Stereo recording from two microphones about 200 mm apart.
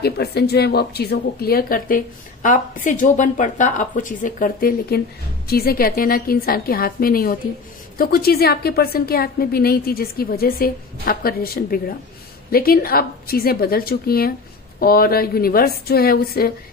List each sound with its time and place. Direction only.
0.0 s speech: 55° left (ahead or behind)